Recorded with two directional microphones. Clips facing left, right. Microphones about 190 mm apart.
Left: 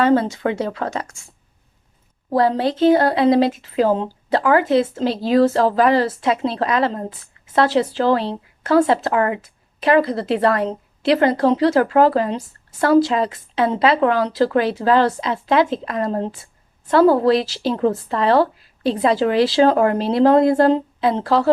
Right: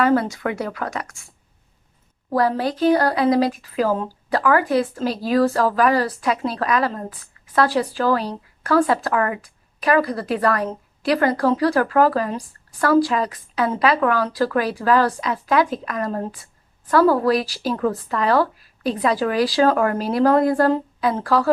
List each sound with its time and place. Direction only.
0.0 s speech: 25° left (ahead or behind)
2.3 s speech: 25° left (ahead or behind)